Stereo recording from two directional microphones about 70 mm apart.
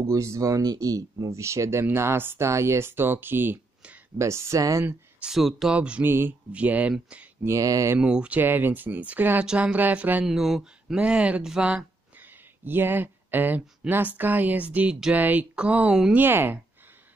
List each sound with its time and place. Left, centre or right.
0.1 s speech: right
4.2 s speech: right
5.2 s speech: centre
5.8 s speech: centre
6.0 s speech: right
6.5 s speech: right
7.4 s speech: right
8.0 s speech: centre
8.4 s speech: right
10.2 s speech: centre
12.2 s speech: right
16.2 s speech: right